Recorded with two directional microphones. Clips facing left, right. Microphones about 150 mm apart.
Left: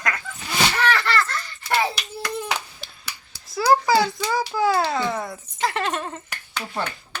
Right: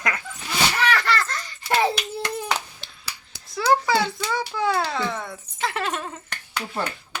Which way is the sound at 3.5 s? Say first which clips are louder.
Left 2 dB; 5° left (ahead or behind).